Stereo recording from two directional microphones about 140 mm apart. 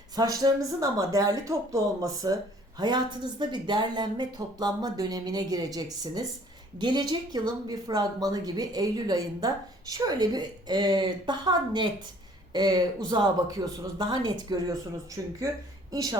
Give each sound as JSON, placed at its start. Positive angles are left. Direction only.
{"t": 0.2, "sound": "speech", "side_deg": -30}